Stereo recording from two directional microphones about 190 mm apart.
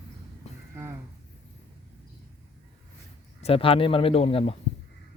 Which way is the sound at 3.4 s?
30° left (ahead or behind).